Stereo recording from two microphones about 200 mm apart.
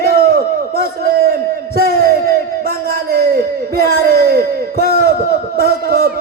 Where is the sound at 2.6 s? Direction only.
50° right (ahead or behind).